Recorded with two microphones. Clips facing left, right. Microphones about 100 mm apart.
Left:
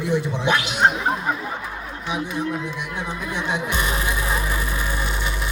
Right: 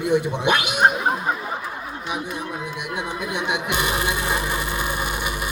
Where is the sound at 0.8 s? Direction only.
10° right (ahead or behind).